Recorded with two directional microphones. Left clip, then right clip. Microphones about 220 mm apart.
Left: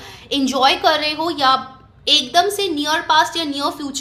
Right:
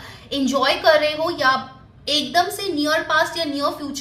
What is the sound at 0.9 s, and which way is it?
Speech, 45° left (ahead or behind).